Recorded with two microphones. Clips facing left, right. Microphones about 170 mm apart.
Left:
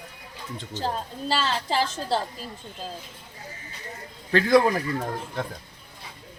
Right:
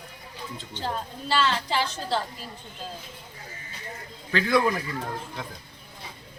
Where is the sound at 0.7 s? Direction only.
40° left (ahead or behind).